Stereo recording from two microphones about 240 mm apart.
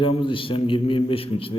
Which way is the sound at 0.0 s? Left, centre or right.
Left.